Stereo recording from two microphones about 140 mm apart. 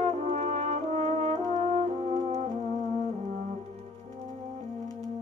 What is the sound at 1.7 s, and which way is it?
French horn, 50° right (ahead or behind).